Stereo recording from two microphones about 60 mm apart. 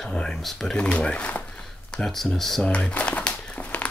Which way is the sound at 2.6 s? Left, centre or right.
Centre.